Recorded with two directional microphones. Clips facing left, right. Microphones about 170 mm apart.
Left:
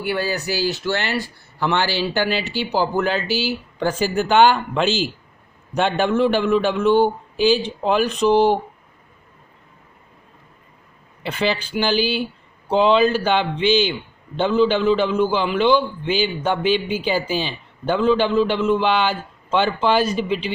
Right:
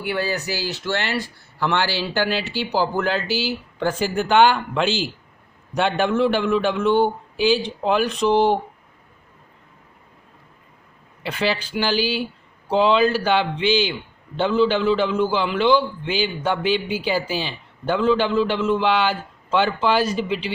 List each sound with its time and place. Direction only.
0.6 s a man's voice: 15° left (ahead or behind)
11.2 s a man's voice: 20° left (ahead or behind)